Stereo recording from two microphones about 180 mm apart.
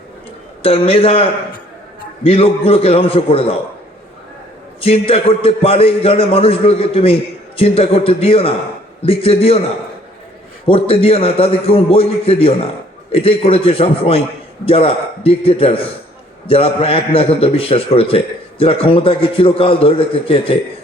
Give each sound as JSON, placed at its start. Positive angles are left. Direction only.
{"t": 0.6, "sound": "a man's voice", "side_deg": 30}
{"t": 4.8, "sound": "a man's voice", "side_deg": 30}
{"t": 10.7, "sound": "a man's voice", "side_deg": 30}